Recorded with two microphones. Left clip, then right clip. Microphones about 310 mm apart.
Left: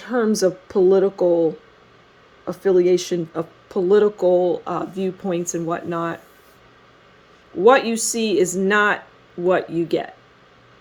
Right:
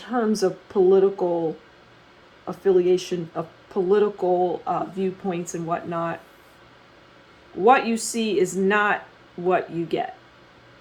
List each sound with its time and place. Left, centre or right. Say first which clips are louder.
0.0 s speech: left 4 dB; left
2.4 s speech: left 3 dB; left
7.6 s speech: left 3 dB; left